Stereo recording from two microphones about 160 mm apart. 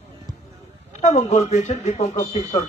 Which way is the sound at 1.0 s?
45° left (ahead or behind).